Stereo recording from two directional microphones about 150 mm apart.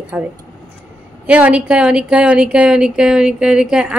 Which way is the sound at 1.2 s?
10° right (ahead or behind).